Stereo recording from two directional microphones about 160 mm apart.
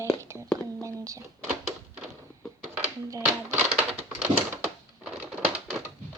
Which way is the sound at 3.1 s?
20° right (ahead or behind).